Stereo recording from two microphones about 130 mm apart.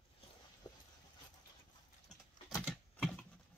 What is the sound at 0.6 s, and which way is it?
Dog, 30° left (ahead or behind).